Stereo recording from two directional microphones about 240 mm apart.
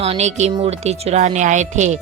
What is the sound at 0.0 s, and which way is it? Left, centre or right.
Speech, right.